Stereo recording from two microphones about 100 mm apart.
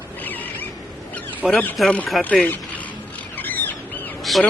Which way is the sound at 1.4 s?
5° right (ahead or behind).